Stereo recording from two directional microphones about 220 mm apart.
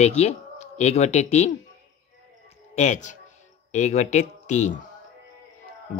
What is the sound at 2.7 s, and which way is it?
Speech, 30° left (ahead or behind).